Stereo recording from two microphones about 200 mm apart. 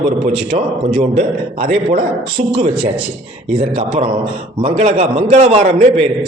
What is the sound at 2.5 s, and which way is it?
A man's voice, 30° right (ahead or behind).